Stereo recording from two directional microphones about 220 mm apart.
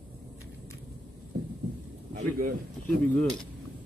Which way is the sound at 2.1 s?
35° right (ahead or behind).